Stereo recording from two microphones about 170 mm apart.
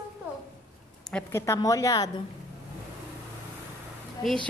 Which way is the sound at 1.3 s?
15° left (ahead or behind).